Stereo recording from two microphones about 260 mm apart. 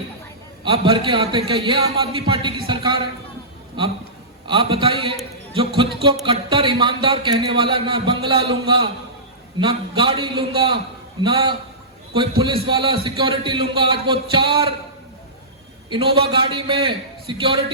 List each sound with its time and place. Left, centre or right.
0.6 s speech: centre
4.4 s speech: centre
16.3 s speech: centre